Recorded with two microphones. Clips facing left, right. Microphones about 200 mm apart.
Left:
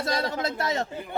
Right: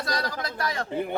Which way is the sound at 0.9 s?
60° right (ahead or behind).